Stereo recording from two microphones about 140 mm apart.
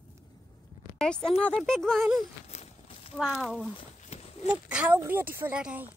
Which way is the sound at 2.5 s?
50° left (ahead or behind).